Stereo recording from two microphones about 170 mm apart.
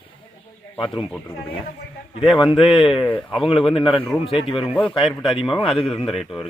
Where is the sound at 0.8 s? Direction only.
30° left (ahead or behind).